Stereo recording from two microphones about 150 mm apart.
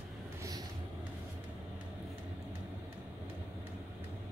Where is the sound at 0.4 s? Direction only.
25° right (ahead or behind).